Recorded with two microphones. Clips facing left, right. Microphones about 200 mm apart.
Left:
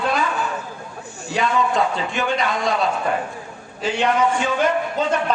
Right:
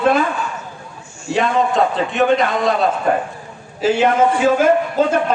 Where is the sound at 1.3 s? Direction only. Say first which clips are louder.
Right 4 dB; centre (ahead or behind).